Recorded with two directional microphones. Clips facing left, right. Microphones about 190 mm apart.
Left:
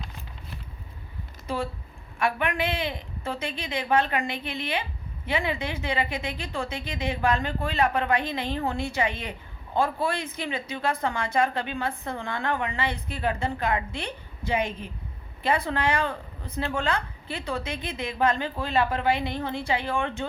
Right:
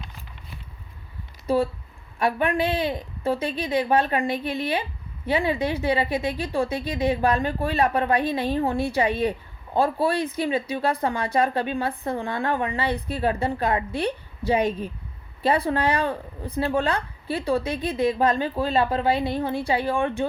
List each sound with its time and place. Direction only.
2.1 s speech: 35° right (ahead or behind)